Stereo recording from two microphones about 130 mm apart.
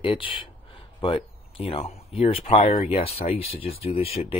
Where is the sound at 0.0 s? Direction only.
40° left (ahead or behind).